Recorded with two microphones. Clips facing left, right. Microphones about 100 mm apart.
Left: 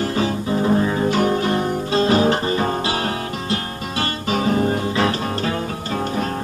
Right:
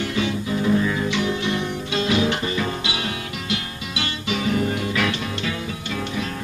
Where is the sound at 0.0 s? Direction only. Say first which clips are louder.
Left 3 dB; 40° left (ahead or behind).